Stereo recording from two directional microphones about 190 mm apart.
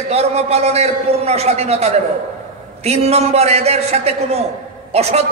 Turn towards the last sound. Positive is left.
turn(degrees=-35)  # may be behind; listen again after turning